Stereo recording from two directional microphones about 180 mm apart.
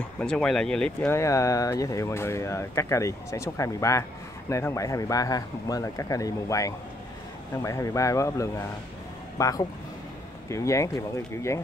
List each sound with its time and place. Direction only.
0.2 s speech: 5° left (ahead or behind)